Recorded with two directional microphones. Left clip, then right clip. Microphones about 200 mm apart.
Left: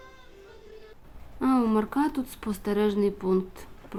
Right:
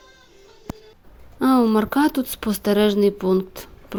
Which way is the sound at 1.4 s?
30° right (ahead or behind).